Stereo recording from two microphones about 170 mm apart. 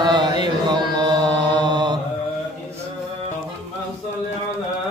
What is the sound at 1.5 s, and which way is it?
Mantra, 25° right (ahead or behind).